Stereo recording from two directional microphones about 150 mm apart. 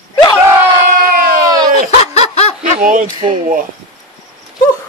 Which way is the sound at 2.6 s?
65° right (ahead or behind).